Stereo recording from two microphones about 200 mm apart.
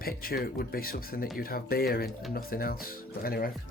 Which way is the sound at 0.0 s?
45° left (ahead or behind).